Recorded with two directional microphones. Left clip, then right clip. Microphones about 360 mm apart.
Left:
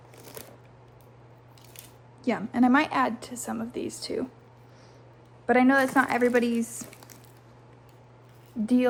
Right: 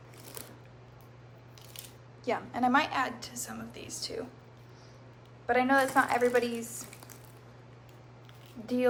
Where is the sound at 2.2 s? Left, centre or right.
Left.